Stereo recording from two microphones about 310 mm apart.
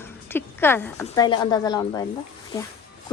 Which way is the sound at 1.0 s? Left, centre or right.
Centre.